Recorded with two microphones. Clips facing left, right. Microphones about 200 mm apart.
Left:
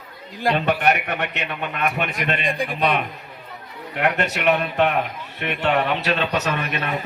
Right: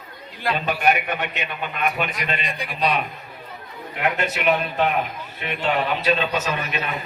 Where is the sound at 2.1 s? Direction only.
55° left (ahead or behind).